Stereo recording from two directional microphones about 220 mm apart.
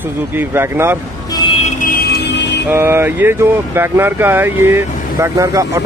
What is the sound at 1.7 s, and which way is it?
Music, 40° left (ahead or behind).